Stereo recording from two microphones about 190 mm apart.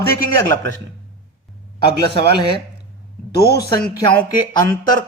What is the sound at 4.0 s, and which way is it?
Speech, 20° left (ahead or behind).